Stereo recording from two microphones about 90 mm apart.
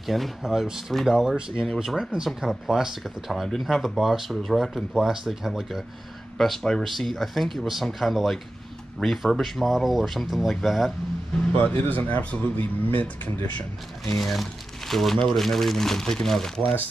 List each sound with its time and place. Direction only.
0.0 s speech: centre (ahead or behind)
11.5 s speech: 20° left (ahead or behind)
14.1 s speech: centre (ahead or behind)